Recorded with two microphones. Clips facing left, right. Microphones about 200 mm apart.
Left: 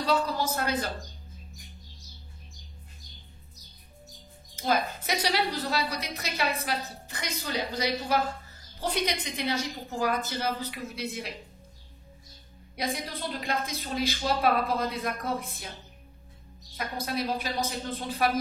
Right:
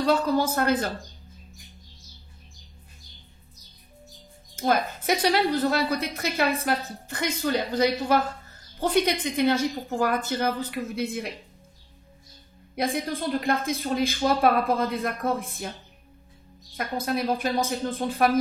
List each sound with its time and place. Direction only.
0.0 s a woman's voice: 55° right (ahead or behind)
4.6 s a woman's voice: 50° right (ahead or behind)
12.7 s a woman's voice: 50° right (ahead or behind)
16.7 s a woman's voice: 50° right (ahead or behind)